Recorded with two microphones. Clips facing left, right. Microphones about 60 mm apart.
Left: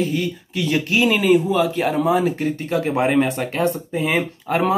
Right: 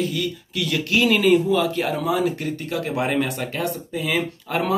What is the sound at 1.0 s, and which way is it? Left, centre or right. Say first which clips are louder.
Speech: even; centre.